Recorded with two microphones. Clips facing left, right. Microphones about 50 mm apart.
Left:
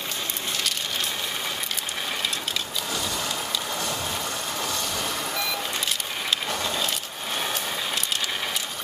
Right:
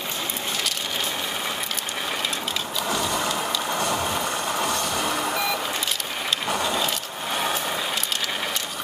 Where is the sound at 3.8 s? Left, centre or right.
Centre.